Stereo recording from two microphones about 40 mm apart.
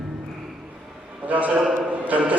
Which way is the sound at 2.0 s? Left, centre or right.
Right.